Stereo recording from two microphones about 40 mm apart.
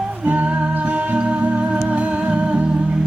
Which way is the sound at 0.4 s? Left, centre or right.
Right.